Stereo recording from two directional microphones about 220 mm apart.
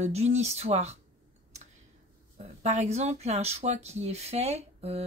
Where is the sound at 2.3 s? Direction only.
30° right (ahead or behind).